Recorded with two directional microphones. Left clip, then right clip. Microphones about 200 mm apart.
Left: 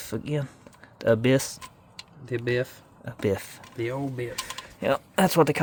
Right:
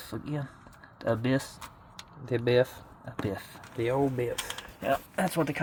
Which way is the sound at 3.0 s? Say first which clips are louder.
Left 8 dB; 40° left (ahead or behind).